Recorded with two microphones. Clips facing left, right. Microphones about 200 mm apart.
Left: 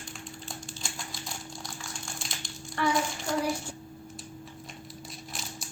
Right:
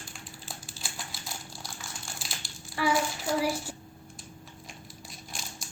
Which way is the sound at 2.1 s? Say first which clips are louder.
Left 3 dB; 5° right (ahead or behind).